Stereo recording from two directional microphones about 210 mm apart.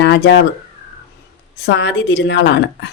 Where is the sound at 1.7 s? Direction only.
55° left (ahead or behind).